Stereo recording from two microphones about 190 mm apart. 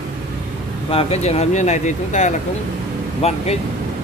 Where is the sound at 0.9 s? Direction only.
35° left (ahead or behind).